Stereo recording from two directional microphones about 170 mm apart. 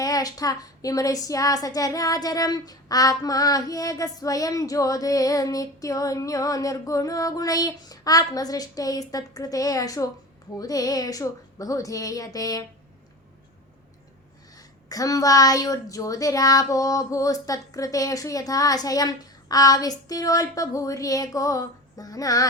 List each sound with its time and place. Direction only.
0.0 s speech: 20° left (ahead or behind)
14.5 s speech: 20° left (ahead or behind)